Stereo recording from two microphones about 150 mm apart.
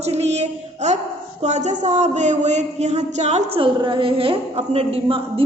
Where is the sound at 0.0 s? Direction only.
45° right (ahead or behind).